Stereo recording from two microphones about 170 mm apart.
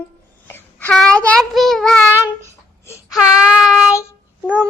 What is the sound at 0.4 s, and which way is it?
Child singing, 10° left (ahead or behind).